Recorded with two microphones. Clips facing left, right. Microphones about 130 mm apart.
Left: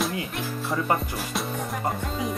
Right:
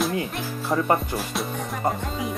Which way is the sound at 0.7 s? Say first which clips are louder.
Right 5 dB; 45° right (ahead or behind).